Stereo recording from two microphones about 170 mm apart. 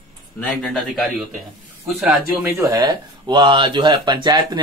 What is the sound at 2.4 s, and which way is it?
Speech, 15° right (ahead or behind).